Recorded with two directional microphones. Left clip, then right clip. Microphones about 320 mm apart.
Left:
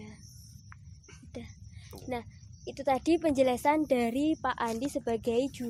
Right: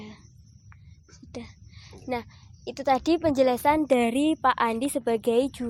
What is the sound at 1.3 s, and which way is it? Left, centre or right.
A woman's voice, centre.